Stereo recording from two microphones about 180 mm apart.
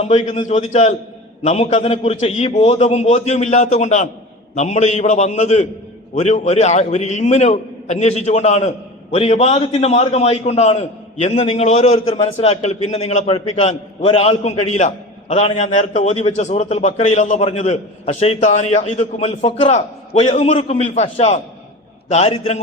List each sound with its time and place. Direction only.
0.0 s a man's voice: 35° left (ahead or behind)